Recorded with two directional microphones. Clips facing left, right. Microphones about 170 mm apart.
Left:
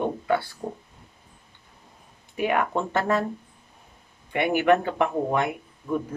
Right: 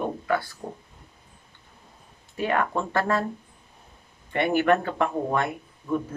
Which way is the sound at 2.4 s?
15° left (ahead or behind).